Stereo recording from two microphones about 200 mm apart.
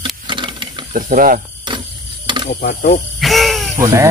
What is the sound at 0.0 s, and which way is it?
Ratchet, 25° right (ahead or behind).